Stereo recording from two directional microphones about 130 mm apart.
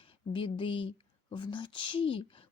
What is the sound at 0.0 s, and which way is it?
Speech, 40° left (ahead or behind).